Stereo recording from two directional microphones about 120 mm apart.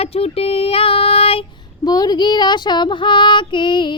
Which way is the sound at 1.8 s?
35° left (ahead or behind).